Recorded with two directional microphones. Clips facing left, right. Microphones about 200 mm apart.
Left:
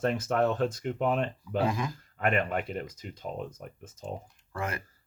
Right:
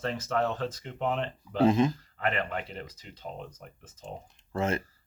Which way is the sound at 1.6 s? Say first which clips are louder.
Right 7 dB; 25° right (ahead or behind).